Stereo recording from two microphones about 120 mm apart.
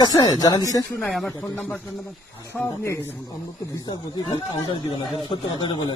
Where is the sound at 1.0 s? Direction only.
5° left (ahead or behind).